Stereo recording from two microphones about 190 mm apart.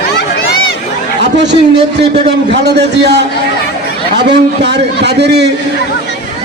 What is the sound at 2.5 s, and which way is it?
A man's voice, 65° right (ahead or behind).